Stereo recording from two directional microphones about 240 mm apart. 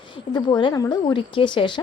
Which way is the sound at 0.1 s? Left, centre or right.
Centre.